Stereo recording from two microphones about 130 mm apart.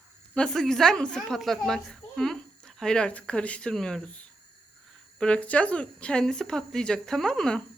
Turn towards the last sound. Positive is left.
turn(degrees=5)  # may be behind; listen again after turning